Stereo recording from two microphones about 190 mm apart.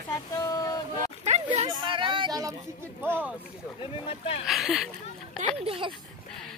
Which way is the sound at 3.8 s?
30° left (ahead or behind).